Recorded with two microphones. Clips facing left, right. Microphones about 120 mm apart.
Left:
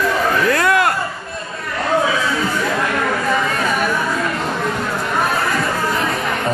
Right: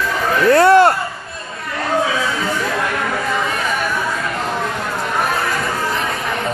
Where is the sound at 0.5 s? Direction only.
30° right (ahead or behind).